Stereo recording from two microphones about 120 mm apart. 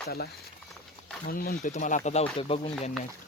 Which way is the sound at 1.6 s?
85° left.